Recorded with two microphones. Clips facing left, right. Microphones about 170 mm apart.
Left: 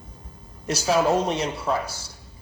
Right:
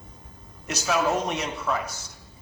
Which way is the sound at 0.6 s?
30° left (ahead or behind).